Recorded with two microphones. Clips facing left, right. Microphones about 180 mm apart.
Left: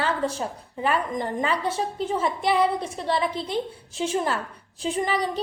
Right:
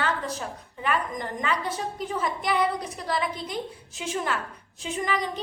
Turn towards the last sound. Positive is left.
turn(degrees=35)  # may be behind; listen again after turning